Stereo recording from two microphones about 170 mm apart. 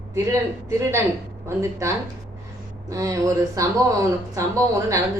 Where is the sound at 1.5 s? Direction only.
15° right (ahead or behind).